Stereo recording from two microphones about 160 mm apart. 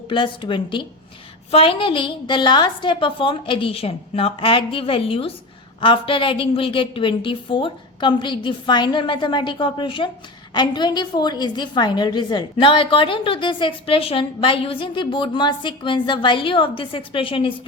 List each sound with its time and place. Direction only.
0.1 s a woman's voice: 30° left (ahead or behind)